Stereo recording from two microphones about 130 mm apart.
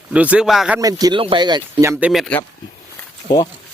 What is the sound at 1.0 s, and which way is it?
Speech, 40° right (ahead or behind).